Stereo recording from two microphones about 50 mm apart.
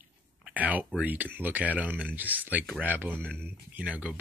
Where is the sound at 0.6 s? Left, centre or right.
Right.